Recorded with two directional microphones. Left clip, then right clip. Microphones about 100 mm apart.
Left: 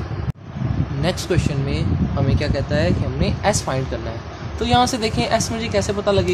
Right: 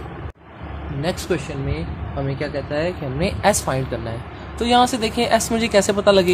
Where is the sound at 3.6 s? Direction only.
20° right (ahead or behind).